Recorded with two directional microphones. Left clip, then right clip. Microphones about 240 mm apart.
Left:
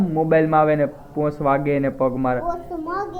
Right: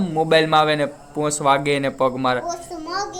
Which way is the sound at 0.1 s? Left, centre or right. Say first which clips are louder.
Right 2 dB; right.